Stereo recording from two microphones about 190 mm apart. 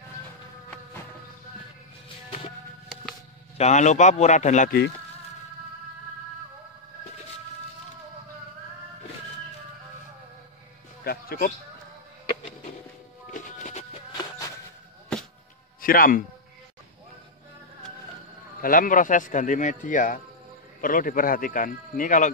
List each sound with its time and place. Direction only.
3.5 s a man's voice: 35° left (ahead or behind)
11.1 s bird: 55° left (ahead or behind)
13.3 s music: 40° left (ahead or behind)
15.8 s a man's voice: 45° left (ahead or behind)
18.6 s speech: 45° left (ahead or behind)